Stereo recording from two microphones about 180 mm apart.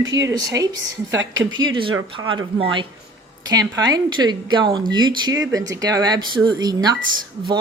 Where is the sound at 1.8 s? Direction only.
30° right (ahead or behind).